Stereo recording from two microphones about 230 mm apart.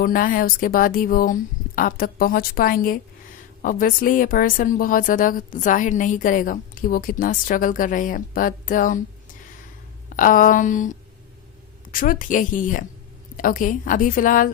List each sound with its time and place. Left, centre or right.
0.0 s speech: left
10.1 s speech: left